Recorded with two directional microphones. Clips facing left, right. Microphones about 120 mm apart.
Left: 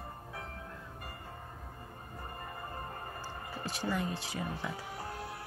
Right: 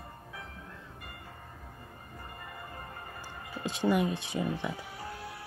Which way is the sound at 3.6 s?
20° right (ahead or behind).